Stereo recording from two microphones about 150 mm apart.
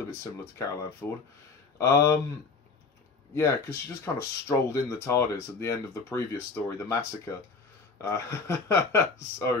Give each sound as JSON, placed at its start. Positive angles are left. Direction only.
{"t": 0.2, "sound": "speech", "side_deg": 20}
{"t": 3.3, "sound": "speech", "side_deg": 20}